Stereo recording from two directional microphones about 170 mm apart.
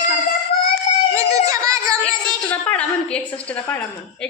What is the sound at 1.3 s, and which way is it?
Speech, 20° right (ahead or behind).